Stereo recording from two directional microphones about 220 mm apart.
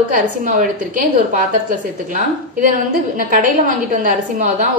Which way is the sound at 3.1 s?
35° right (ahead or behind).